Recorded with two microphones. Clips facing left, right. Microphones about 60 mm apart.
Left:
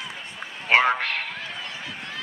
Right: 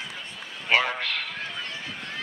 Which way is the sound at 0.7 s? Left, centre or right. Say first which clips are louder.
Left 4 dB; left.